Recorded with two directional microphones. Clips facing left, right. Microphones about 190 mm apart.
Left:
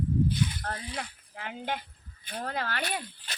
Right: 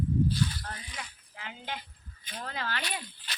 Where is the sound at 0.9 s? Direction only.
55° left (ahead or behind).